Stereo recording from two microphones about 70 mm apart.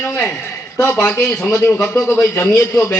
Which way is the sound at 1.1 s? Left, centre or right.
Left.